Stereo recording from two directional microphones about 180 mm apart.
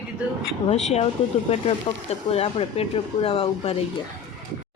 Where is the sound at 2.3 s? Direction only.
35° left (ahead or behind).